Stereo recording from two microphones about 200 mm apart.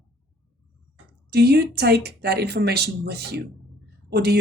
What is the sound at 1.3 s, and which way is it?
A woman's voice, 55° right (ahead or behind).